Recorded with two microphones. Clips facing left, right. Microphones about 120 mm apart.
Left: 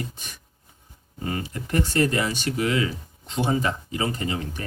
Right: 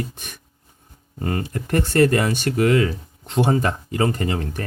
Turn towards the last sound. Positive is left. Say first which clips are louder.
# right 4 dB
turn(degrees=-55)  # may be behind; listen again after turning